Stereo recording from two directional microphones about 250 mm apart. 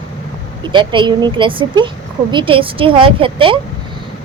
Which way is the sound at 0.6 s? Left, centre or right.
Centre.